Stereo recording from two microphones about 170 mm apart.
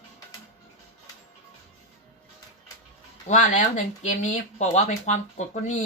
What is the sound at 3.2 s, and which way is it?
Speech, 45° left (ahead or behind).